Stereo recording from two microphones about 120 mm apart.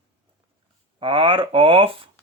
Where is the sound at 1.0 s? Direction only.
45° right (ahead or behind).